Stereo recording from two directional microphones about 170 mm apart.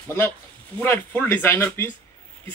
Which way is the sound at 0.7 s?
10° left (ahead or behind).